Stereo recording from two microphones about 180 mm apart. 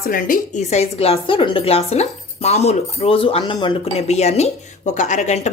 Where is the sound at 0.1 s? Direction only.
50° left (ahead or behind).